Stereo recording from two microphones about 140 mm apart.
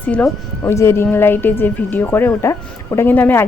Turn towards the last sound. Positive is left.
turn(degrees=15)  # may be behind; listen again after turning